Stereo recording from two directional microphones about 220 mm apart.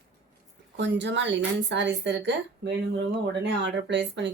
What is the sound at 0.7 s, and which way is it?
Speech, 55° right (ahead or behind).